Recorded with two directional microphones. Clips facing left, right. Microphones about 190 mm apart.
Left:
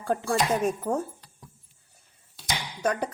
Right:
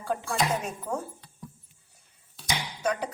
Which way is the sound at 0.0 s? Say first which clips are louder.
Left 3 dB; 50° left (ahead or behind).